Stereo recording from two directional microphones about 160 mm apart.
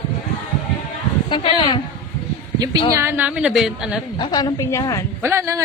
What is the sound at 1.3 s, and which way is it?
Speech, 30° left (ahead or behind).